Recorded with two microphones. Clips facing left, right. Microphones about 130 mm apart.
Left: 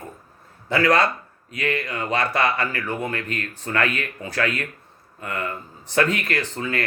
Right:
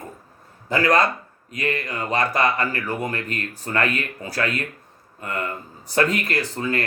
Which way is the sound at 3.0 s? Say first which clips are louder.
Even; 35° right (ahead or behind).